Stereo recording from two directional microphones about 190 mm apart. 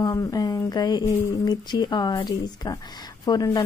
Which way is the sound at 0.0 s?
20° left (ahead or behind).